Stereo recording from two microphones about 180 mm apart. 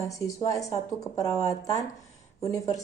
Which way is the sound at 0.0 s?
20° left (ahead or behind).